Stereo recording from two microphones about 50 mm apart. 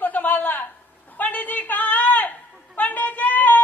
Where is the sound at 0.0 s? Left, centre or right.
Left.